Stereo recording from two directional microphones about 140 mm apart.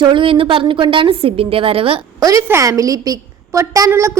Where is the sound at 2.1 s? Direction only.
25° right (ahead or behind).